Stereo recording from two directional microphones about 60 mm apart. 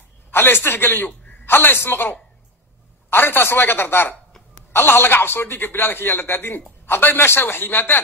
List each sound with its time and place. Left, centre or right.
0.3 s a man's voice: left